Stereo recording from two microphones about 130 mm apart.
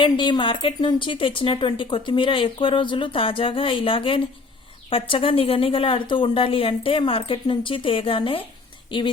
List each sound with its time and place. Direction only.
0.0 s a woman's voice: 40° left (ahead or behind)